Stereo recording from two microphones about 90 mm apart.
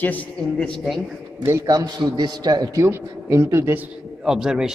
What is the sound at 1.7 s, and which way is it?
A man's voice, 50° right (ahead or behind).